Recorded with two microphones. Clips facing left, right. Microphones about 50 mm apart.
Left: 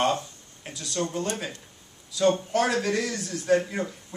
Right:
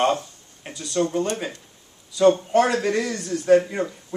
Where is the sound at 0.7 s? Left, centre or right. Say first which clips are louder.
Right 3 dB; centre.